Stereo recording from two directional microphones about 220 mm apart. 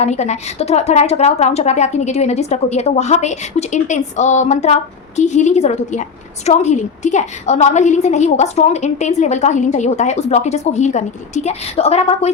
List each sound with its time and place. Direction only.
0.0 s a woman's voice: 30° left (ahead or behind)